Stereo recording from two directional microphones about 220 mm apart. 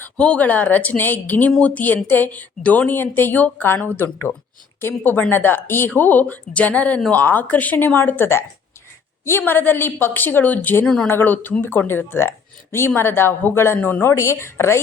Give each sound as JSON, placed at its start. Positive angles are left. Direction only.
{"t": 0.0, "sound": "speech", "side_deg": 5}